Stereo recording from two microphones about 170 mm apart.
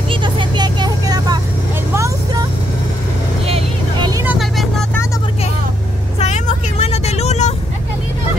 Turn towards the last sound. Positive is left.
turn(degrees=40)  # may be behind; listen again after turning